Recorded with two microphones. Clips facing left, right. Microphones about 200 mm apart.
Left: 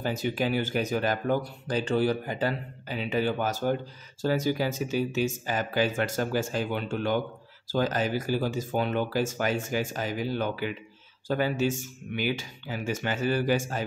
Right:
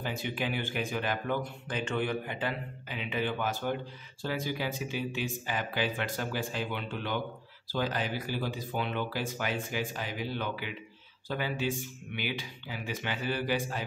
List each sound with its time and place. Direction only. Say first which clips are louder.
0.0 s speech: left 6 dB; 40° left (ahead or behind)